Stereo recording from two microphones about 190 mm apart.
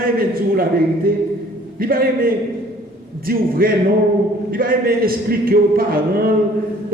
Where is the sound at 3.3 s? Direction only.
50° right (ahead or behind).